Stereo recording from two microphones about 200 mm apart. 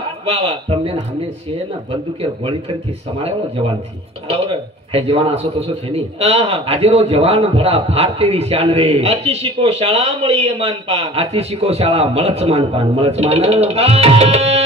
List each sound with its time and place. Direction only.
0.2 s a man's voice: 30° right (ahead or behind)
3.2 s speech: 30° right (ahead or behind)
4.9 s a man's voice: 30° right (ahead or behind)